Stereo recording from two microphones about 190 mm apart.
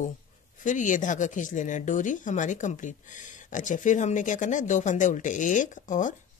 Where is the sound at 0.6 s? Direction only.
40° left (ahead or behind).